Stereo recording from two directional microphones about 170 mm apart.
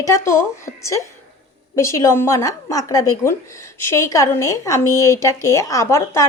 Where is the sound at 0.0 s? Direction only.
15° left (ahead or behind).